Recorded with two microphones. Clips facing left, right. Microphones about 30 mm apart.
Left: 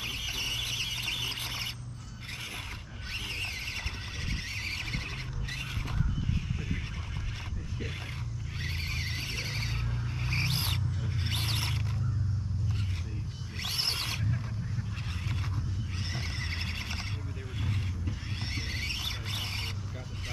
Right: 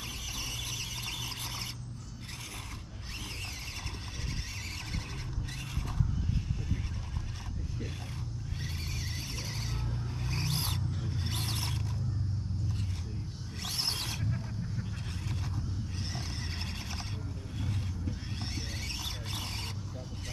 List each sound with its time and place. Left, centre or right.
0.0 s vehicle: left
3.3 s vehicle: left
4.6 s a sound: left
8.6 s vehicle: left
13.6 s a sound: left
15.2 s neigh: left
18.5 s squeal: left